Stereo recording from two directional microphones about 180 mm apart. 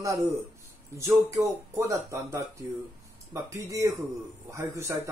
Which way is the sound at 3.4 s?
20° right (ahead or behind).